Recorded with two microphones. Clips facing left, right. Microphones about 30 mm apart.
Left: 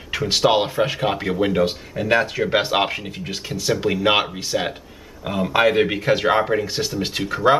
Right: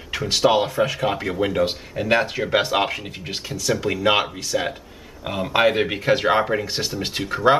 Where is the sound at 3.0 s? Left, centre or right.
Centre.